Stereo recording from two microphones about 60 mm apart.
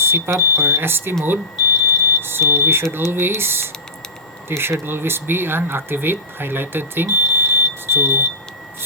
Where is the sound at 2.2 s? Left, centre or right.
Right.